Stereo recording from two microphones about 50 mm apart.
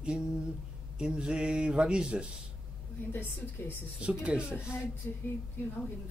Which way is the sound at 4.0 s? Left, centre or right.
Right.